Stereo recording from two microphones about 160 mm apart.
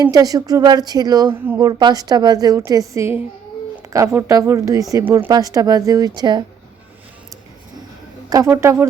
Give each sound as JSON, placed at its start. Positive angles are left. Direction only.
{"t": 0.0, "sound": "a woman's voice", "side_deg": -25}
{"t": 8.3, "sound": "speech", "side_deg": -20}